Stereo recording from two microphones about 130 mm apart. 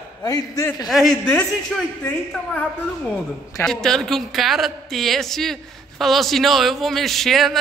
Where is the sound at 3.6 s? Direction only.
5° left (ahead or behind).